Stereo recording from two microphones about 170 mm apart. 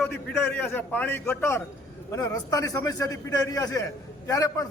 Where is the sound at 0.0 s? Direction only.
10° left (ahead or behind).